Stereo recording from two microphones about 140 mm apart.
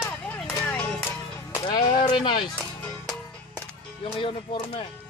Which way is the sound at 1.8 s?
35° left (ahead or behind).